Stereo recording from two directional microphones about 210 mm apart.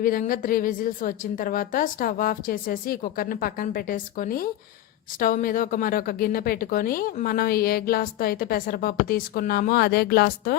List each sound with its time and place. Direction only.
0.0 s a woman's voice: 40° left (ahead or behind)